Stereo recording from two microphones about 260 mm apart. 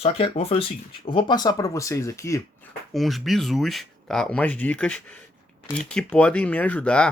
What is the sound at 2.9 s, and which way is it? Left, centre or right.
Speech, centre.